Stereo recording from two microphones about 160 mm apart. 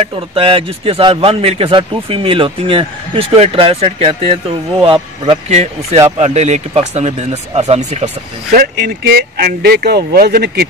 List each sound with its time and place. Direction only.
0.0 s a man's voice: 35° right (ahead or behind)
5.5 s speech: 45° right (ahead or behind)
8.7 s speech: 80° right